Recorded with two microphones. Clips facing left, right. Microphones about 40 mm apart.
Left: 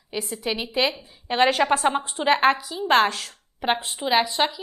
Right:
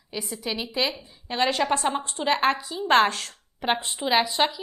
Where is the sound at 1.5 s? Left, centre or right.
Centre.